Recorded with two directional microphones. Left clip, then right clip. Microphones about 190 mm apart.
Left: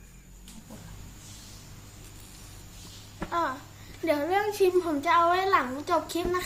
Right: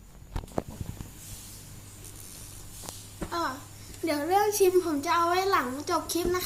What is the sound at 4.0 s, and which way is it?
A child's voice, 15° left (ahead or behind).